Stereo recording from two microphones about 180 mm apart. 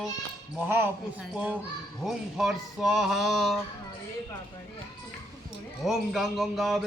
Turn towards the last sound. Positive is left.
turn(degrees=0)  # may be behind; listen again after turning